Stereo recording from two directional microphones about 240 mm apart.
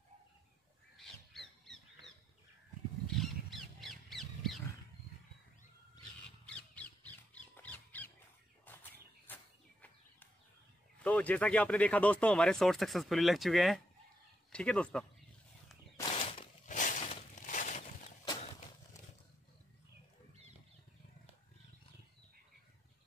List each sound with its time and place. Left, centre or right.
0.9 s crow: centre
3.1 s crow: centre
6.4 s squawk: centre
9.3 s a sound: centre
11.0 s speech: centre
16.0 s a sound: left